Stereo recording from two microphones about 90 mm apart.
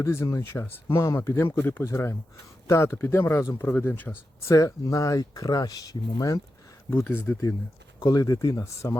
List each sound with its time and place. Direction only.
0.0 s speech: 30° left (ahead or behind)
4.4 s speech: 35° left (ahead or behind)
6.9 s speech: 20° left (ahead or behind)
7.9 s speech: 45° left (ahead or behind)